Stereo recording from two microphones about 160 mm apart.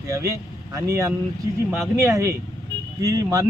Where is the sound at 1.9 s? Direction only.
15° right (ahead or behind).